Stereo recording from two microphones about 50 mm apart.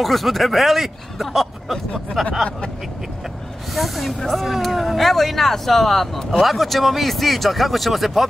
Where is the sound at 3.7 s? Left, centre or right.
Centre.